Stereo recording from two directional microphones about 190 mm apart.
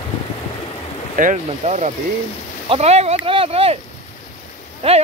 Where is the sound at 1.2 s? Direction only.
40° right (ahead or behind).